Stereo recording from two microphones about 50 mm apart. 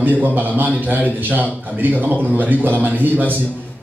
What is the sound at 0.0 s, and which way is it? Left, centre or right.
A man's voice, right.